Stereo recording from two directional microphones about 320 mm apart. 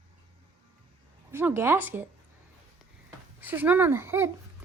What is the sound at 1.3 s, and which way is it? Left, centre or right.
Speech, centre.